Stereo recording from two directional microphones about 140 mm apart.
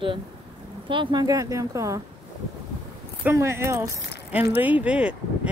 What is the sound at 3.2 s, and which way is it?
Speech, 20° right (ahead or behind).